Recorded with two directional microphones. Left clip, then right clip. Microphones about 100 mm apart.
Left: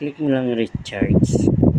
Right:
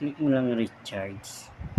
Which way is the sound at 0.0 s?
50° left (ahead or behind).